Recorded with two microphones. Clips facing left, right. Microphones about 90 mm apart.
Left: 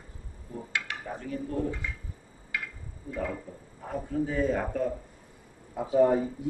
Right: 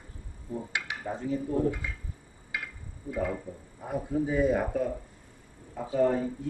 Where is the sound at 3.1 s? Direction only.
15° right (ahead or behind).